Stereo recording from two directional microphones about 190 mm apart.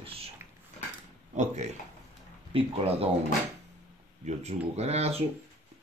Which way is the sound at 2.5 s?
30° right (ahead or behind).